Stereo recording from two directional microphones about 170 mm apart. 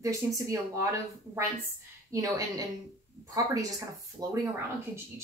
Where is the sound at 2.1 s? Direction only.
20° right (ahead or behind).